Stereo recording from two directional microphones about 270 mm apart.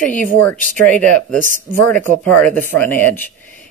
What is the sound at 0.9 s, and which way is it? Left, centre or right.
Speech, centre.